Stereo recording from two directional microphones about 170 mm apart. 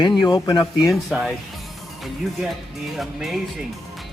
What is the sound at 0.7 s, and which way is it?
Speech, centre (ahead or behind).